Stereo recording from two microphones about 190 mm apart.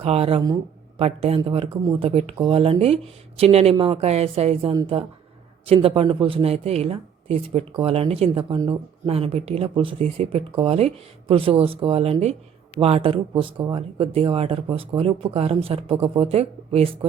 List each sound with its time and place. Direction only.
0.0 s speech: 30° right (ahead or behind)